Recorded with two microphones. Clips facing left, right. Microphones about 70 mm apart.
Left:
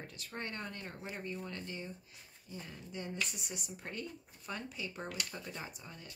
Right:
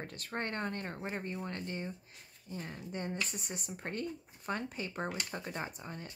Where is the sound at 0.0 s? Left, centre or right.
Right.